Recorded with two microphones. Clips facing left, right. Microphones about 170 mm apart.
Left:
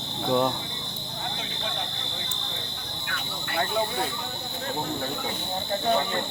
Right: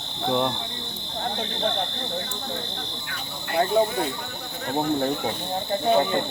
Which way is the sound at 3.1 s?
25° right (ahead or behind).